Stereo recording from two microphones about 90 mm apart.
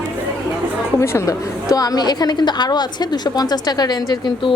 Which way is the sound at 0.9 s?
30° left (ahead or behind).